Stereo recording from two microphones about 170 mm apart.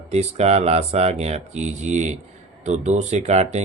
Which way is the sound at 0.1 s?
40° right (ahead or behind).